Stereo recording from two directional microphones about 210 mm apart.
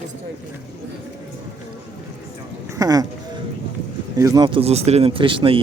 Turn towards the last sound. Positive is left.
turn(degrees=-25)  # may be behind; listen again after turning